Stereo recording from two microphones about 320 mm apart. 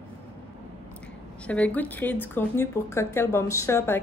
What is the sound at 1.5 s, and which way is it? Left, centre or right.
Speech, centre.